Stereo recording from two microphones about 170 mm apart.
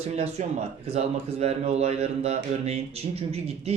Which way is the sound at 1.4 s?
40° right (ahead or behind).